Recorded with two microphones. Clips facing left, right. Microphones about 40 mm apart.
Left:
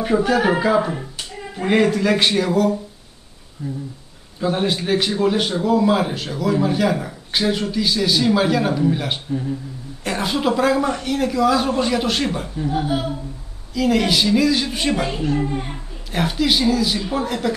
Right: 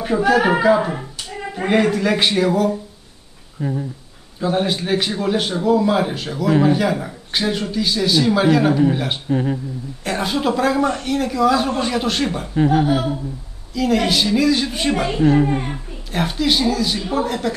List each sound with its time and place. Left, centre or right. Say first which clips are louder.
0.0 s speech: right 1 dB; centre
3.6 s speech: right 5 dB; right
4.4 s speech: right 1 dB; centre
9.3 s speech: right 7 dB; right
10.0 s speech: even; centre
12.5 s speech: right 8 dB; right
13.7 s speech: even; centre
15.1 s a child's voice: right 6 dB; right
16.1 s speech: even; centre